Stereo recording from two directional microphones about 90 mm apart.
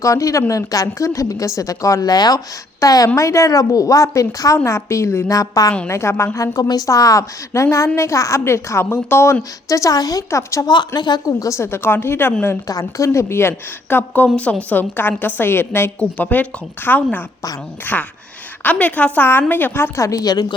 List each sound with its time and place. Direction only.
0.0 s a woman's voice: 40° left (ahead or behind)
5.9 s a woman's voice: 30° left (ahead or behind)
10.7 s speech: 55° left (ahead or behind)
11.3 s a woman's voice: 35° left (ahead or behind)
12.6 s a woman's voice: 40° left (ahead or behind)